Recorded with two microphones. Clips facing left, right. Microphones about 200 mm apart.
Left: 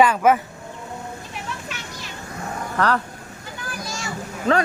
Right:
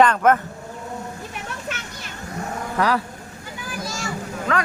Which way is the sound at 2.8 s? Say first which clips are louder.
Even; 10° right (ahead or behind).